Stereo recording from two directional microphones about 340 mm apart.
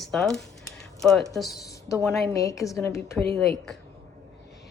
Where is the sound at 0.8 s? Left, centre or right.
Centre.